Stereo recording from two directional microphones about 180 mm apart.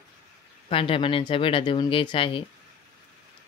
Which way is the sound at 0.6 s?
30° left (ahead or behind).